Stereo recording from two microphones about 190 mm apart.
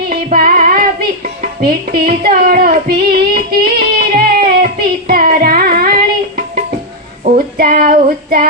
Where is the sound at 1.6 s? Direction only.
55° right (ahead or behind).